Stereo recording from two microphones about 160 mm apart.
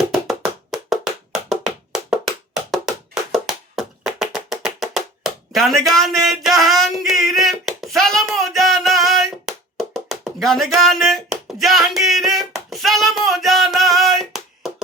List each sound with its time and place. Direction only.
0.1 s wood block: centre (ahead or behind)
3.3 s music: centre (ahead or behind)
7.3 s a sound: centre (ahead or behind)